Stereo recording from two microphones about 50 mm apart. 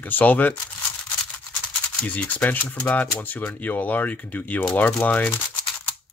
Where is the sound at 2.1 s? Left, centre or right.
Left.